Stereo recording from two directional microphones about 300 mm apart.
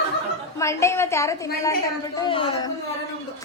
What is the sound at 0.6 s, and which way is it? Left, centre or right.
A woman's voice, centre.